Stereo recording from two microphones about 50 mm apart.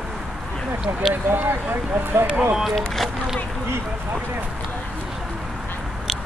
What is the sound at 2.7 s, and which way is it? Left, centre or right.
Speech, centre.